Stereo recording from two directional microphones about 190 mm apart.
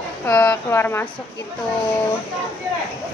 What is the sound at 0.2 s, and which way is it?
Speech, 15° left (ahead or behind).